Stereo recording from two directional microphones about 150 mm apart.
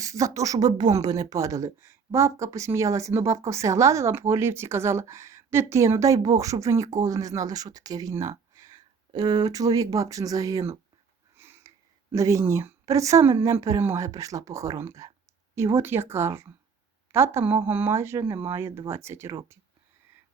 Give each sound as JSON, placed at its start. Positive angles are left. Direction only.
{"t": 0.0, "sound": "speech", "side_deg": -20}
{"t": 11.3, "sound": "a sound", "side_deg": -15}
{"t": 12.1, "sound": "speech", "side_deg": -20}